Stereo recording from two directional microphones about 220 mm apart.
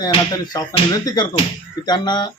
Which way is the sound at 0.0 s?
20° left (ahead or behind).